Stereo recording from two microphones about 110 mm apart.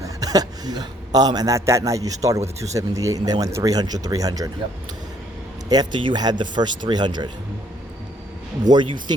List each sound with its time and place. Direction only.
0.0 s a man's voice: 35° right (ahead or behind)
5.6 s speech: 40° right (ahead or behind)
8.6 s a man's voice: 40° right (ahead or behind)